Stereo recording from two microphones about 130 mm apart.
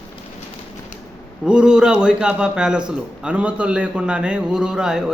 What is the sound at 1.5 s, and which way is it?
A man's voice, 5° right (ahead or behind).